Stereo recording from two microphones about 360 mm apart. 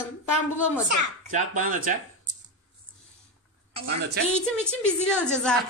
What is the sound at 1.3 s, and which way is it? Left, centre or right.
Speech, right.